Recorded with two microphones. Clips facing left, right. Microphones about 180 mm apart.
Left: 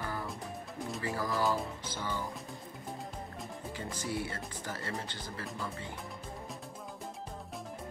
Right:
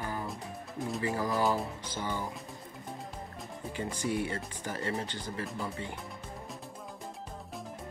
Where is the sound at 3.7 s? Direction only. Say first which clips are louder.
Right 5 dB; 15° right (ahead or behind).